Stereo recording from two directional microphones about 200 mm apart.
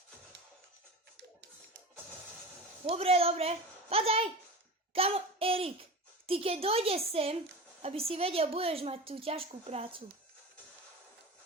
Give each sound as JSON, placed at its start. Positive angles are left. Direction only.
{"t": 2.8, "sound": "a woman's voice", "side_deg": -30}